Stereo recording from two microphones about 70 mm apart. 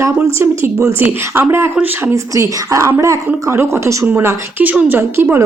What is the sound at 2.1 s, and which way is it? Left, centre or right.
A woman's voice, right.